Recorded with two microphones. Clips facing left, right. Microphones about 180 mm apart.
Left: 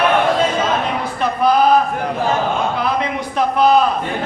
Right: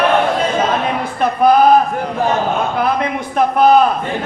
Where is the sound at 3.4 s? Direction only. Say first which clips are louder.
Right 3 dB; 50° right (ahead or behind).